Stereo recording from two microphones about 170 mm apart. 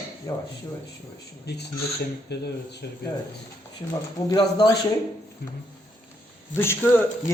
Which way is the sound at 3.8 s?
20° left (ahead or behind).